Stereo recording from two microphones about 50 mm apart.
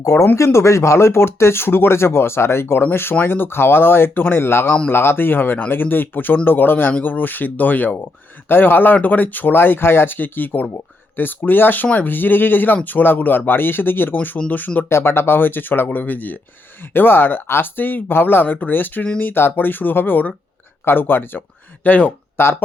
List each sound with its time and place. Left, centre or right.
0.3 s speech: left
14.8 s speech: left
22.4 s speech: left